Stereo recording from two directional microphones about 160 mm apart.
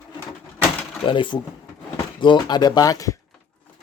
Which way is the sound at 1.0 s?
30° left (ahead or behind).